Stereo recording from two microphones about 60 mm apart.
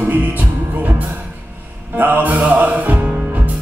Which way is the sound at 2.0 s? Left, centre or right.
Right.